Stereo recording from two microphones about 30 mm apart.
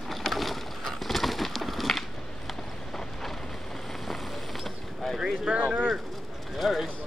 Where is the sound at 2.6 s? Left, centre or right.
Centre.